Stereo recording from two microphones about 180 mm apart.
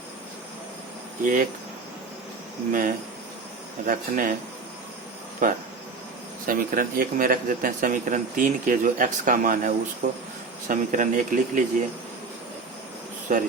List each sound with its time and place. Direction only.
1.2 s speech: 50° right (ahead or behind)
3.8 s speech: 50° right (ahead or behind)
5.4 s speech: 45° right (ahead or behind)
13.3 s speech: 45° right (ahead or behind)